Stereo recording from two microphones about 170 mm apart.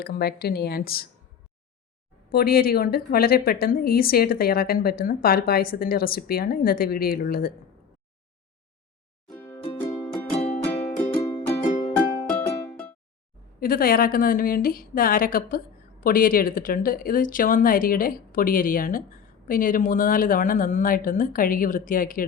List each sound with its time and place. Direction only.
0.0 s a woman's voice: 70° left (ahead or behind)
2.3 s a woman's voice: 60° left (ahead or behind)
10.1 s music: 10° left (ahead or behind)
10.4 s music: 40° left (ahead or behind)
11.7 s music: 45° left (ahead or behind)
13.6 s a woman's voice: 60° left (ahead or behind)